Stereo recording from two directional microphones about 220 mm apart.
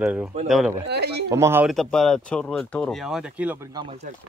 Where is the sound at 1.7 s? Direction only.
Centre (ahead or behind); by 4.1 s 25° right (ahead or behind).